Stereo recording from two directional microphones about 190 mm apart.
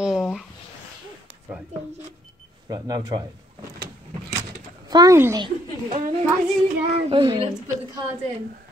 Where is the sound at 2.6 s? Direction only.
20° right (ahead or behind).